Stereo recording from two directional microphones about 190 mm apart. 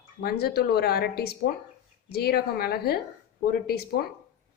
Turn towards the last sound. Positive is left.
turn(degrees=55)  # may be behind; listen again after turning